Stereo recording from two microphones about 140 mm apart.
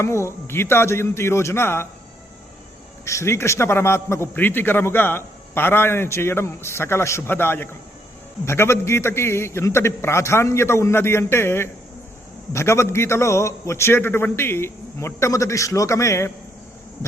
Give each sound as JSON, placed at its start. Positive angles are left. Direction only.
{"t": 0.0, "sound": "a man's voice", "side_deg": 20}
{"t": 3.0, "sound": "a man's voice", "side_deg": 20}